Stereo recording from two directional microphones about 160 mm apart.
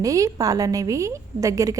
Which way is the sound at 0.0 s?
20° right (ahead or behind).